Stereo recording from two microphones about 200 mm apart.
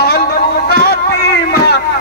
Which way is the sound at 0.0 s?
50° left (ahead or behind).